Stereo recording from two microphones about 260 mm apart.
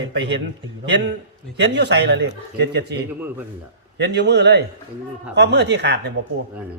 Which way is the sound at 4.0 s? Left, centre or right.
Right.